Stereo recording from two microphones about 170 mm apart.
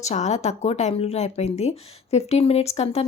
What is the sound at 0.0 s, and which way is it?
Speech, 40° left (ahead or behind).